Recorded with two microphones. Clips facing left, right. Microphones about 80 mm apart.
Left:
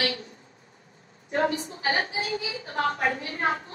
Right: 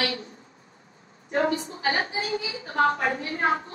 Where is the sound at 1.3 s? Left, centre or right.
Right.